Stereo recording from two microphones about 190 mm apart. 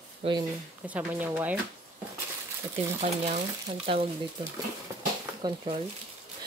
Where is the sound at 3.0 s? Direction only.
35° right (ahead or behind).